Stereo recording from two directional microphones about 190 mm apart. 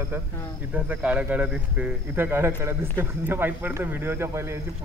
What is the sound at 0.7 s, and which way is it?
Speech, 5° right (ahead or behind).